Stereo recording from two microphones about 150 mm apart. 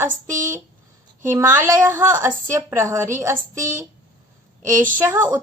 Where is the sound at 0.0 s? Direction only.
20° right (ahead or behind).